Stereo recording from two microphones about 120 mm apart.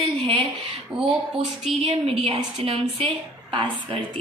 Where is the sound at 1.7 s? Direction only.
55° right (ahead or behind).